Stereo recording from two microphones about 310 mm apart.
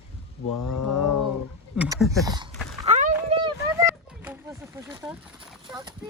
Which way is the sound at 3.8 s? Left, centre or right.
Centre.